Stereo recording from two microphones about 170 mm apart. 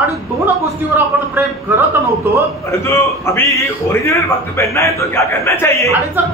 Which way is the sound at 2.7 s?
15° left (ahead or behind).